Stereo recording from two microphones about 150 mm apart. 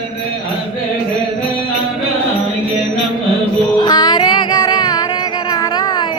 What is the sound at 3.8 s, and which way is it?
Music, 25° left (ahead or behind).